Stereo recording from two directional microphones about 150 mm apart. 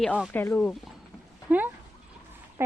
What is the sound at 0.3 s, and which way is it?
Speech, 15° left (ahead or behind).